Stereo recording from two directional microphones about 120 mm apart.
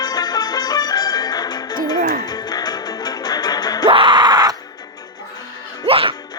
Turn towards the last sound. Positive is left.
turn(degrees=-50)  # may be behind; listen again after turning